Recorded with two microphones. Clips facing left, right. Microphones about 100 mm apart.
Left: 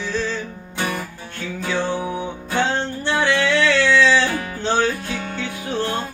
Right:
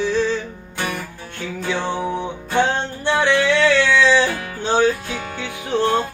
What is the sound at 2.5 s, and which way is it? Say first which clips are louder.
Music: right 2 dB; 15° right (ahead or behind).